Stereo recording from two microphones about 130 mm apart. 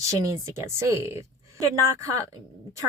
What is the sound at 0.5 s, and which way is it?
Speech, 20° right (ahead or behind).